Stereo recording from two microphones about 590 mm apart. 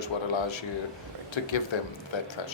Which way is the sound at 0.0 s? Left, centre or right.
Left.